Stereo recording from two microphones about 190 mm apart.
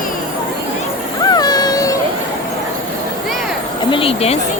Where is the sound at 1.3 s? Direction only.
20° left (ahead or behind).